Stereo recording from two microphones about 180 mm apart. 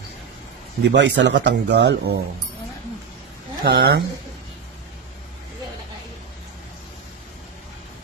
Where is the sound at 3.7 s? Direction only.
90° right.